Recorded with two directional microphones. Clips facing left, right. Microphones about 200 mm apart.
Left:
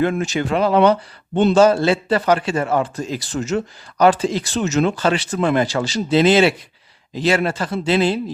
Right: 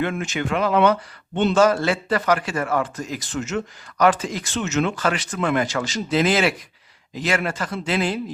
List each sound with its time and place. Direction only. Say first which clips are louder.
0.0 s a man's voice: left 5 dB; 35° left (ahead or behind)